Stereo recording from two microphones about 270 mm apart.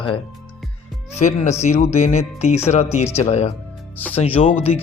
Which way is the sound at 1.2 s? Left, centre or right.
Left.